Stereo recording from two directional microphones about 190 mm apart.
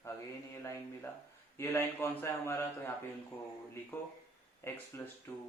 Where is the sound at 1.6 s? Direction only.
10° left (ahead or behind).